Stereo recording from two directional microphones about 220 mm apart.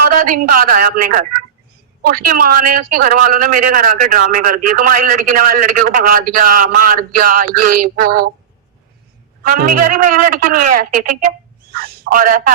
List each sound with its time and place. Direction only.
0.1 s a man's voice: 40° right (ahead or behind)
9.4 s a man's voice: 40° right (ahead or behind)